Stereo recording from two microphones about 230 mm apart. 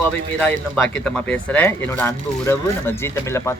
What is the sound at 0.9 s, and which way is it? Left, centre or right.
Speech, centre.